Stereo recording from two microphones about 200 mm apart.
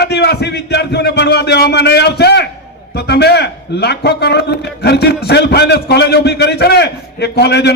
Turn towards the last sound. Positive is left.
turn(degrees=55)  # may be behind; listen again after turning